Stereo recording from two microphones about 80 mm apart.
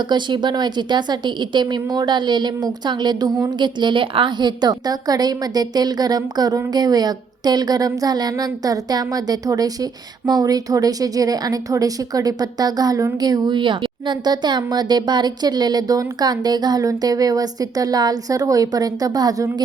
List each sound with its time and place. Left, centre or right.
0.0 s a woman's voice: right
3.5 s a woman's voice: right